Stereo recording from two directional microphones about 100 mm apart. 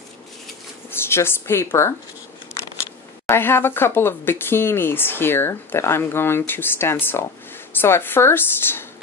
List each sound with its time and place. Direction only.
0.8 s speech: 25° left (ahead or behind)
3.3 s speech: 25° left (ahead or behind)